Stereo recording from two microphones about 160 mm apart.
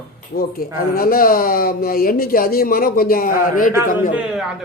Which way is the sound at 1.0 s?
65° left (ahead or behind).